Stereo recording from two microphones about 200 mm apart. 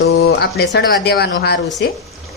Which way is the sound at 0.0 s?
55° left (ahead or behind).